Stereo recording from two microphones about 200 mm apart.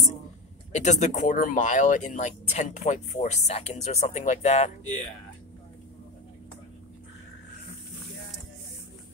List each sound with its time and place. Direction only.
0.7 s speech: 35° left (ahead or behind)